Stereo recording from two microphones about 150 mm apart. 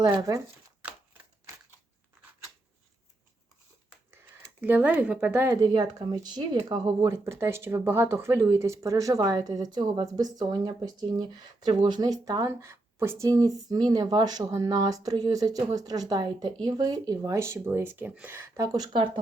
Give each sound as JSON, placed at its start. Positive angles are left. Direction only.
{"t": 0.0, "sound": "speech", "side_deg": -25}
{"t": 4.6, "sound": "speech", "side_deg": -10}